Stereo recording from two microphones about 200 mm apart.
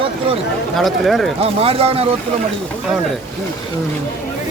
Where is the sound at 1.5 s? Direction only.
30° right (ahead or behind).